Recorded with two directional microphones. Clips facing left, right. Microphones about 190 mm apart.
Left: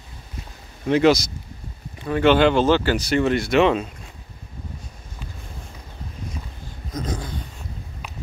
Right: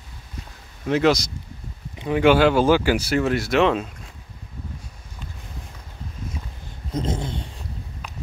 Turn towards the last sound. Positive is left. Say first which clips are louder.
# right 3 dB
turn(degrees=-25)  # may be behind; listen again after turning